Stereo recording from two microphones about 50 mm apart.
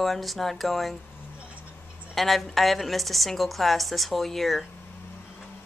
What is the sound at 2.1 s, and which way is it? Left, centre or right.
Speech, centre.